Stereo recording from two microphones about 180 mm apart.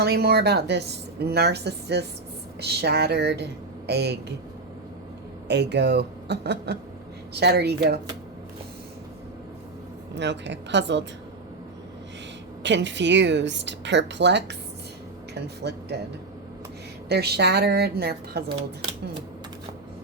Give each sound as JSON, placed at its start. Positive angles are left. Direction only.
{"t": 0.0, "sound": "speech", "side_deg": -60}
{"t": 5.5, "sound": "speech", "side_deg": -70}
{"t": 10.2, "sound": "speech", "side_deg": -75}
{"t": 12.6, "sound": "speech", "side_deg": -80}
{"t": 15.6, "sound": "speech", "side_deg": -70}
{"t": 17.1, "sound": "speech", "side_deg": -65}